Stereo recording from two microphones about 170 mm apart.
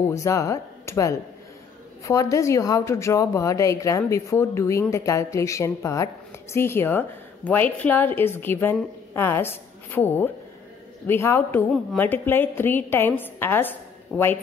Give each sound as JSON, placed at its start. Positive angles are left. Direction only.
{"t": 0.1, "sound": "a woman's voice", "side_deg": 15}